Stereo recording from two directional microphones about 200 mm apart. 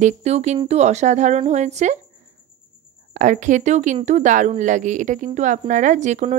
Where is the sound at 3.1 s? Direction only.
40° right (ahead or behind).